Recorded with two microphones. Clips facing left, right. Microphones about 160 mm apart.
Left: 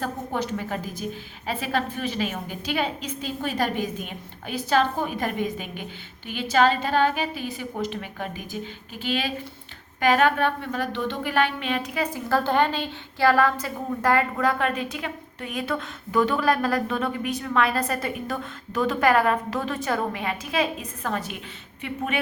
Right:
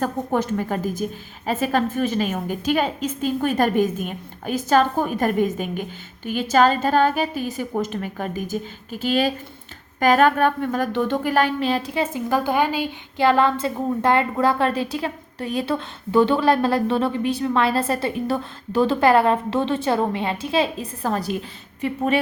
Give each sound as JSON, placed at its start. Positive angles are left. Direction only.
{"t": 0.0, "sound": "a woman's voice", "side_deg": -50}
{"t": 12.3, "sound": "a woman's voice", "side_deg": -10}
{"t": 13.2, "sound": "a woman's voice", "side_deg": -25}